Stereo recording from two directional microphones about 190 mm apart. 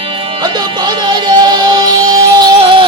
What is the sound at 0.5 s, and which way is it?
Music, 20° right (ahead or behind).